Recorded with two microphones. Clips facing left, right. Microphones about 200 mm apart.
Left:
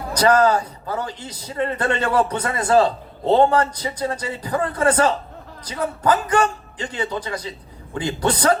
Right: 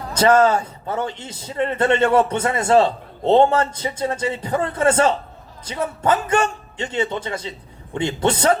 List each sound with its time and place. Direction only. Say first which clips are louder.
0.1 s a man's voice: right 1 dB; 25° right (ahead or behind)